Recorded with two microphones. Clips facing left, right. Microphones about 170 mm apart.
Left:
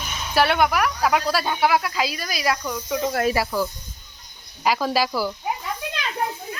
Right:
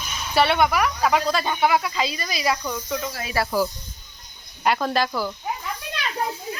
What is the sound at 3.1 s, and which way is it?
Speech, 55° left (ahead or behind).